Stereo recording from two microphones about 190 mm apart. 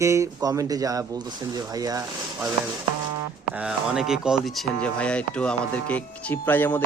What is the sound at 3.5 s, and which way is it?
Speech, 5° right (ahead or behind).